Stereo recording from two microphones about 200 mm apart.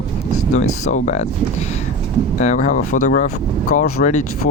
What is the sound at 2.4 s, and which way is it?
Speech, 35° left (ahead or behind).